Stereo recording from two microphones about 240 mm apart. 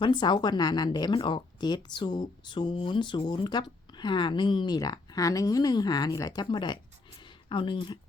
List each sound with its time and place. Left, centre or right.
0.0 s speech: centre